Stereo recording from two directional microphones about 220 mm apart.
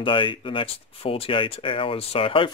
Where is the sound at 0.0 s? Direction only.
25° left (ahead or behind).